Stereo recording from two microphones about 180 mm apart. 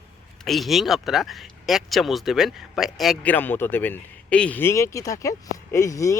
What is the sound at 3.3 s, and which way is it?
Speech, 10° left (ahead or behind).